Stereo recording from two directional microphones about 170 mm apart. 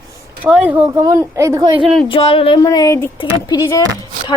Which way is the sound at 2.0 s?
30° left (ahead or behind).